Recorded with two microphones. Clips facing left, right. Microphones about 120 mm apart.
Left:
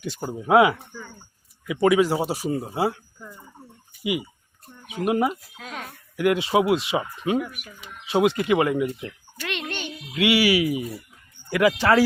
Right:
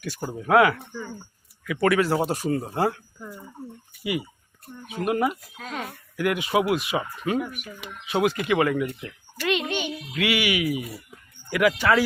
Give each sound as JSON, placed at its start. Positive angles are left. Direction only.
{"t": 0.3, "sound": "speech", "side_deg": 20}
{"t": 4.0, "sound": "speech", "side_deg": 20}
{"t": 5.3, "sound": "speech", "side_deg": 0}
{"t": 6.1, "sound": "speech", "side_deg": 25}
{"t": 7.3, "sound": "speech", "side_deg": 0}
{"t": 8.0, "sound": "speech", "side_deg": 25}
{"t": 9.4, "sound": "a child's voice", "side_deg": 0}
{"t": 10.2, "sound": "speech", "side_deg": 30}